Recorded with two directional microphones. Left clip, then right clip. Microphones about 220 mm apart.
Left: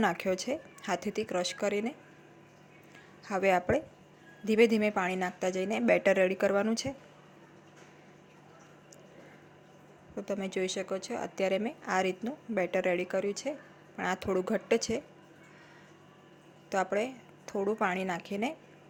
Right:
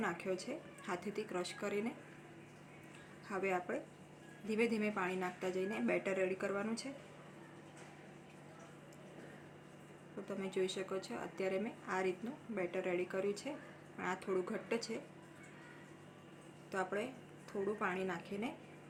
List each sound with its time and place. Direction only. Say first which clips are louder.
0.0 s a woman's voice: left 10 dB; 35° left (ahead or behind)
3.2 s a woman's voice: left 11 dB; 35° left (ahead or behind)
10.2 s a woman's voice: left 6 dB; 35° left (ahead or behind)
16.6 s a woman's voice: left 10 dB; 35° left (ahead or behind)